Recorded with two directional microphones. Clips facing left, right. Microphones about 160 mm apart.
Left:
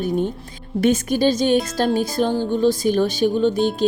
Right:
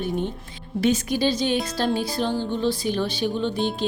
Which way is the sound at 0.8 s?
50° left (ahead or behind).